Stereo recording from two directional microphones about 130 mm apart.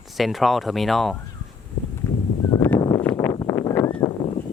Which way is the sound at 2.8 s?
30° left (ahead or behind).